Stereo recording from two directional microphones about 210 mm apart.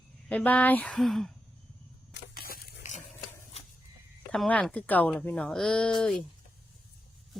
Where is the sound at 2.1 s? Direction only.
45° left (ahead or behind).